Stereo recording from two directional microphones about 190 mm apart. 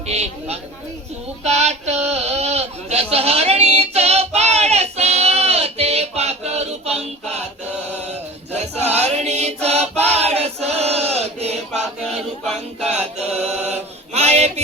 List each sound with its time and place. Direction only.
0.1 s mantra: 35° right (ahead or behind)
1.5 s a sound: 35° right (ahead or behind)
8.5 s choir: 35° right (ahead or behind)
12.8 s mantra: 35° right (ahead or behind)